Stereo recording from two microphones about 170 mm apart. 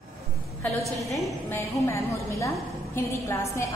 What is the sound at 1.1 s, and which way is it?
A woman's voice, 15° left (ahead or behind).